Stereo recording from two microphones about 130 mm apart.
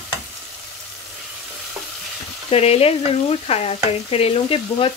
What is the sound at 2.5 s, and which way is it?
Frying, 50° left (ahead or behind).